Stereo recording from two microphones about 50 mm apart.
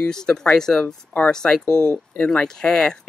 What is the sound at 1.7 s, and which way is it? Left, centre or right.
Speech, right.